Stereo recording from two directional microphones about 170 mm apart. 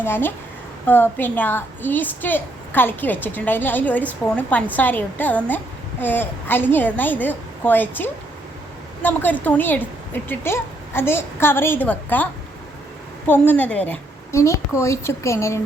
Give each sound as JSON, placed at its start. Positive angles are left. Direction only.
{"t": 0.0, "sound": "a woman's voice", "side_deg": 10}